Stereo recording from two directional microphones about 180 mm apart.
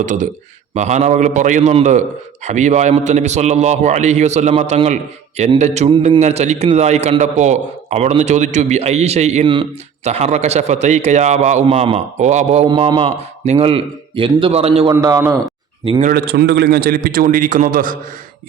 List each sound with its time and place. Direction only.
0.0 s a man's voice: 45° right (ahead or behind)
12.6 s a man's voice: 25° right (ahead or behind)
14.8 s a man's voice: 20° right (ahead or behind)
16.0 s a man's voice: 55° right (ahead or behind)